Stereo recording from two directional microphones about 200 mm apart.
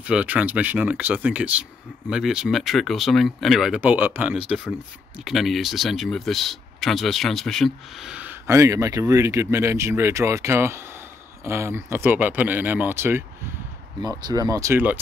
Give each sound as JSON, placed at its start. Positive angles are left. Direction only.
{"t": 0.0, "sound": "speech", "side_deg": -5}